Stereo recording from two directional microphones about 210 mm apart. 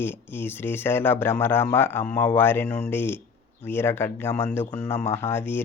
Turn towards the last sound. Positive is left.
turn(degrees=10)  # may be behind; listen again after turning